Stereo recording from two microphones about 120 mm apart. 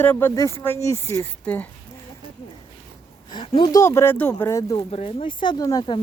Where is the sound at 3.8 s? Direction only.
20° left (ahead or behind).